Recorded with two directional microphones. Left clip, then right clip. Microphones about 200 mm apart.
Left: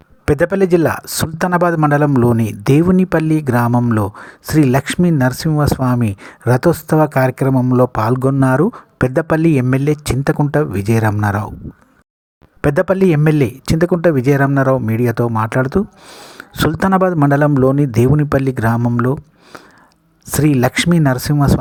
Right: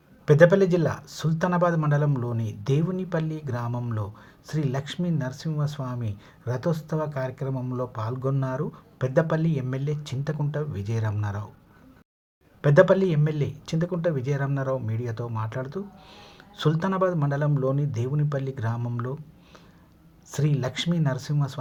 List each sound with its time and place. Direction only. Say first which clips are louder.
0.3 s a man's voice: left 4 dB; 45° left (ahead or behind)
12.6 s a man's voice: left 5 dB; 45° left (ahead or behind)
20.2 s a man's voice: left 15 dB; 45° left (ahead or behind)